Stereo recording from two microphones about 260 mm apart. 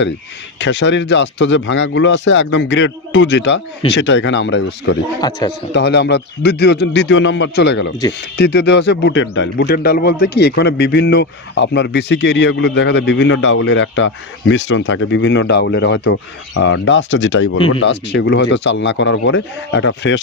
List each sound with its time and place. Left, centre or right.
0.6 s a man's voice: left
5.2 s a man's voice: centre
5.7 s a man's voice: left